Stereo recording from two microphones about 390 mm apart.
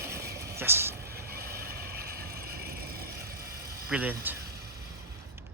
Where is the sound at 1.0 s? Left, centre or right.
Right.